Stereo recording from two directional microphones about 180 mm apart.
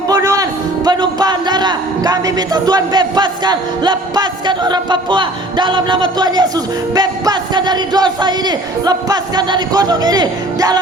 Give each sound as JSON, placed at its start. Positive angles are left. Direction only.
{"t": 0.1, "sound": "music", "side_deg": -20}
{"t": 0.9, "sound": "a man's voice", "side_deg": -25}